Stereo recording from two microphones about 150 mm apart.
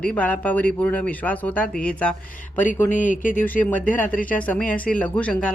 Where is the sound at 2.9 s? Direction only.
60° left (ahead or behind).